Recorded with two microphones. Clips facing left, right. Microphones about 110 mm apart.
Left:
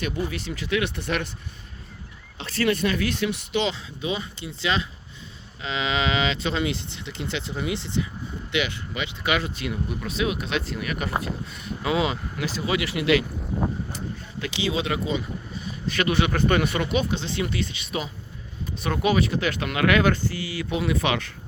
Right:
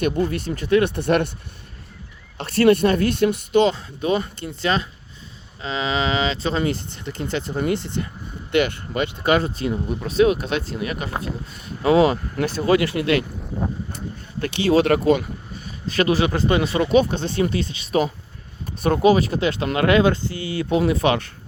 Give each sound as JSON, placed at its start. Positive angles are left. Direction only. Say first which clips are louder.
{"t": 0.0, "sound": "speech", "louder": "right 7 dB", "side_deg": -50}
{"t": 2.4, "sound": "speech", "louder": "right 8 dB", "side_deg": -55}
{"t": 12.7, "sound": "speech", "louder": "right 3 dB", "side_deg": -40}
{"t": 14.4, "sound": "speech", "louder": "right 9 dB", "side_deg": -50}
{"t": 15.9, "sound": "speech", "louder": "right 4 dB", "side_deg": -35}
{"t": 20.7, "sound": "speech", "louder": "right 6 dB", "side_deg": -40}